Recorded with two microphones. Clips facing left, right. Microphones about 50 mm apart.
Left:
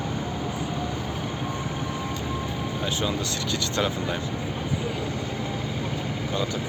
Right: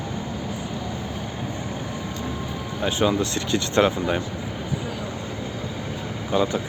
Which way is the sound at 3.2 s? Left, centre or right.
Right.